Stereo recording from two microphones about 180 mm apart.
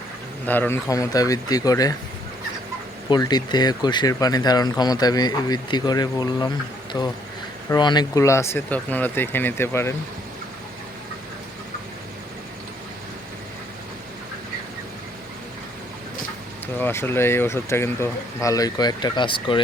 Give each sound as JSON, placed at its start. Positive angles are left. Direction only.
{"t": 0.4, "sound": "speech", "side_deg": 10}
{"t": 3.1, "sound": "speech", "side_deg": 25}
{"t": 7.7, "sound": "speech", "side_deg": 25}
{"t": 16.7, "sound": "speech", "side_deg": 10}